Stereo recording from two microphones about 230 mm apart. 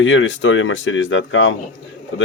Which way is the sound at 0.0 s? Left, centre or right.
Left.